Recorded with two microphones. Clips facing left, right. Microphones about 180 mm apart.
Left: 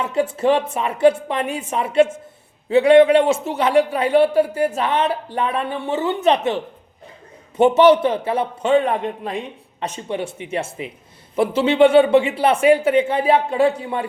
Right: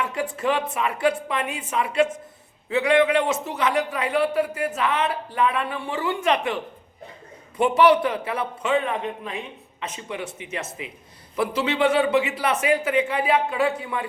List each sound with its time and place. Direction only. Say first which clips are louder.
0.0 s a man's voice: left 6 dB; 25° left (ahead or behind)